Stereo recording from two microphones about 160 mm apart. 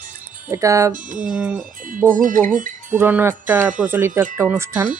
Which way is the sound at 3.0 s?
10° right (ahead or behind).